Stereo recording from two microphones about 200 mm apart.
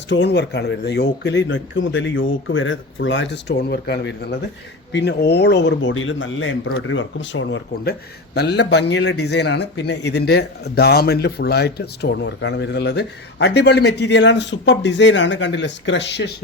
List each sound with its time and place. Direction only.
0.1 s a man's voice: 60° left (ahead or behind)
8.4 s a man's voice: 55° left (ahead or behind)